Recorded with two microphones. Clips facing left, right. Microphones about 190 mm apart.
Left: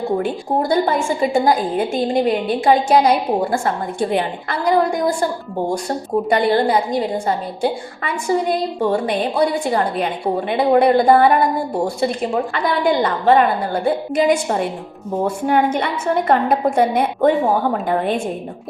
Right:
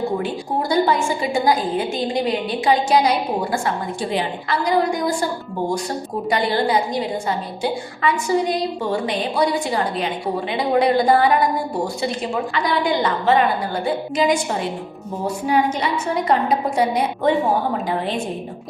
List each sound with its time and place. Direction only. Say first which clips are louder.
0.2 s a woman's voice: left 4 dB; 50° left (ahead or behind)